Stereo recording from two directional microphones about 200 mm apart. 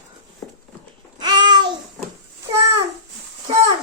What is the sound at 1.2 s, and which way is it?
Babbling, 20° right (ahead or behind).